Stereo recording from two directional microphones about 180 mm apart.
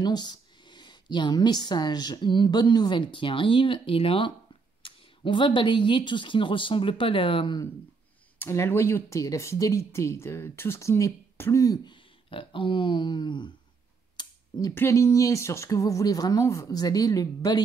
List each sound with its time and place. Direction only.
0.0 s speech: 25° left (ahead or behind)
8.4 s speech: 15° left (ahead or behind)
14.1 s a sound: 25° left (ahead or behind)
14.7 s speech: 15° left (ahead or behind)